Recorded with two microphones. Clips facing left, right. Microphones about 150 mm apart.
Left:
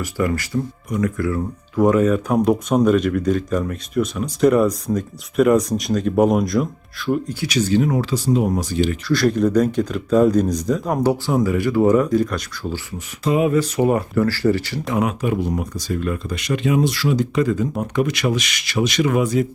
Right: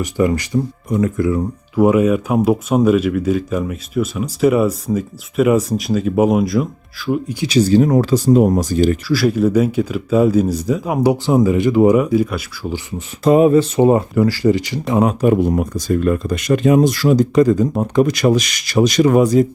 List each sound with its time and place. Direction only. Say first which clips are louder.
0.0 s speech: right 5 dB; 20° right (ahead or behind); by 7.3 s 5° right (ahead or behind)
7.4 s speech: right 6 dB; 30° right (ahead or behind)
9.0 s speech: right 2 dB; 5° right (ahead or behind)
13.2 s speech: right 7 dB; 40° right (ahead or behind)
13.5 s speech: right 5 dB; 25° right (ahead or behind)
14.9 s speech: right 7 dB; 40° right (ahead or behind)